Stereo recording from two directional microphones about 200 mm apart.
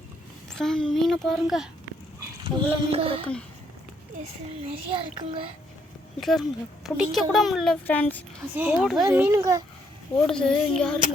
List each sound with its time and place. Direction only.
0.5 s a woman's voice: 5° left (ahead or behind)
2.4 s a child's voice: 25° right (ahead or behind)
6.1 s a woman's voice: centre (ahead or behind)
8.5 s a child's voice: 5° right (ahead or behind)
10.2 s a woman's voice: 5° left (ahead or behind)